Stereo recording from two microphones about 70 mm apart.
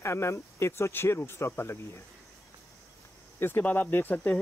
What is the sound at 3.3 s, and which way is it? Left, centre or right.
Speech, left.